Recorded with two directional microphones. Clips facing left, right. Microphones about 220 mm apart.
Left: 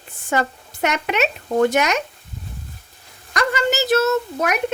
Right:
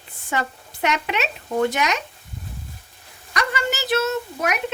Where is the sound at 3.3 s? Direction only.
40° left (ahead or behind).